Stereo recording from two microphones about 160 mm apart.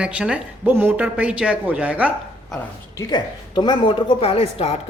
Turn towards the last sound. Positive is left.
turn(degrees=35)  # may be behind; listen again after turning